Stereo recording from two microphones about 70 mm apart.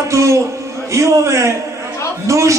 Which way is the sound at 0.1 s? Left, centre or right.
Right.